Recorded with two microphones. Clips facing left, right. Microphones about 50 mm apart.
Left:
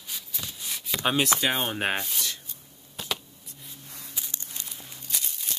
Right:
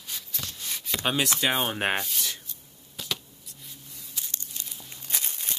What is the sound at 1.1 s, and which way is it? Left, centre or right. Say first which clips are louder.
Speech: left 4 dB; centre.